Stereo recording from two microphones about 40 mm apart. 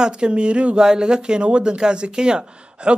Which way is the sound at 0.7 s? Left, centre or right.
Centre.